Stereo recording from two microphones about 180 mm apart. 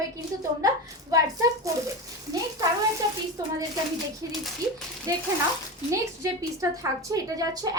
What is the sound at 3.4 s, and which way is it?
Speech, 20° right (ahead or behind).